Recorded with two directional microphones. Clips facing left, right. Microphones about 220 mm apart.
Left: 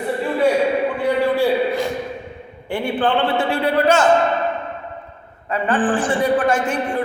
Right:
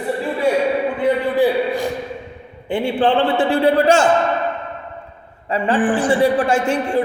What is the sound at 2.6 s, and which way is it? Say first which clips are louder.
A man's voice: right 3 dB; 25° right (ahead or behind).